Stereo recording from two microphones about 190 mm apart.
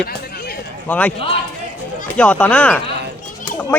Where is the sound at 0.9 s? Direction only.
10° left (ahead or behind).